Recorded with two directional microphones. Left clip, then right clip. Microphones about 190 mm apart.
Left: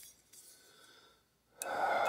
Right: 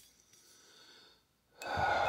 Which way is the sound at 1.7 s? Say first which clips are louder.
Right 1 dB; 20° right (ahead or behind).